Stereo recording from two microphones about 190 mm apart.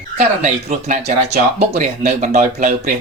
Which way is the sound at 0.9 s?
55° right (ahead or behind).